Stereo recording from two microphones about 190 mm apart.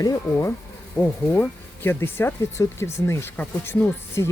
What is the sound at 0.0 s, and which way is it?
Speech, 20° left (ahead or behind).